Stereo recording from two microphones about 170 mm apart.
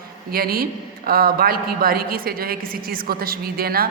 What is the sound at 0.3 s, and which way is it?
A woman's voice, 60° right (ahead or behind).